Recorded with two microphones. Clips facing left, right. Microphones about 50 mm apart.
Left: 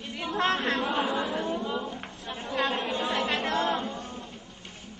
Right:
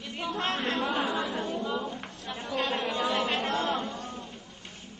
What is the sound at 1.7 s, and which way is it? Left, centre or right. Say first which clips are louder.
Speech: even; centre.